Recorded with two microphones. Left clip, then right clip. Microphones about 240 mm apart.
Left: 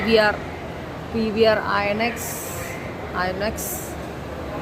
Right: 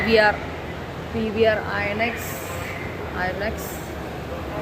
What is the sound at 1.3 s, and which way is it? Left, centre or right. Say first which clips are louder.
Speech: left 2 dB; centre.